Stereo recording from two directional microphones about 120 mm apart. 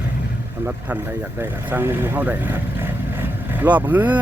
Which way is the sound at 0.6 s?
15° right (ahead or behind).